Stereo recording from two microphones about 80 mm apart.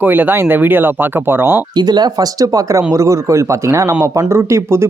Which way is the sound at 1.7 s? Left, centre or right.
Right.